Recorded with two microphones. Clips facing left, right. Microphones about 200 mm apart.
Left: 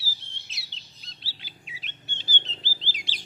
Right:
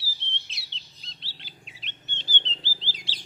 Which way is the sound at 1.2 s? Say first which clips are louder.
Left 1 dB; 5° left (ahead or behind).